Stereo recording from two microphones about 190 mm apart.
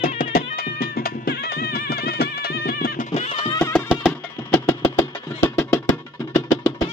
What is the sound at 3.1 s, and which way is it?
Music, 35° left (ahead or behind).